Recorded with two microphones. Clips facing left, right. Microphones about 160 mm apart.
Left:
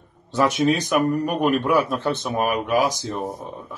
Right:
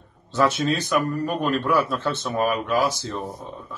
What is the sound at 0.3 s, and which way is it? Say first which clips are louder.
Speech: left 2 dB; 15° left (ahead or behind).